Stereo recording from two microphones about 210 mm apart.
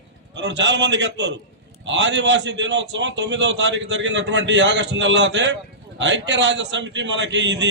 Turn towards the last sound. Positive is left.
turn(degrees=-60)  # may be behind; listen again after turning